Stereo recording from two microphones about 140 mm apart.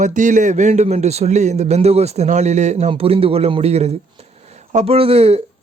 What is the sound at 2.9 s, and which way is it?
Speech, 45° right (ahead or behind).